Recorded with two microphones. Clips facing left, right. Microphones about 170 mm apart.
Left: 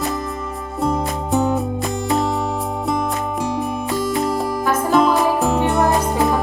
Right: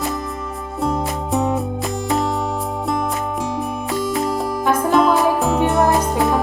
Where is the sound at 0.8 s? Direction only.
Centre (ahead or behind).